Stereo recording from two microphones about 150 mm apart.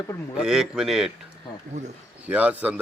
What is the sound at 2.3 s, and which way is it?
Speech, 10° right (ahead or behind).